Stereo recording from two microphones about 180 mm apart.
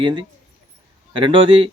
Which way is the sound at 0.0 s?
25° right (ahead or behind).